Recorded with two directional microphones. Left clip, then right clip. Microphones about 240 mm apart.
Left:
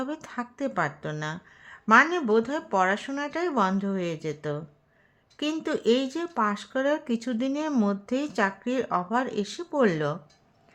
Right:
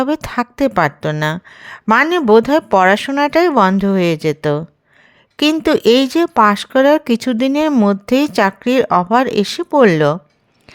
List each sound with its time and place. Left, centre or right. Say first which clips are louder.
0.0 s speech: right 16 dB; right